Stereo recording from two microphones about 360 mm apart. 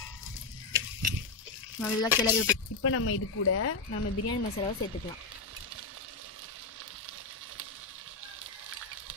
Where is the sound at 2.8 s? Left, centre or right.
Left.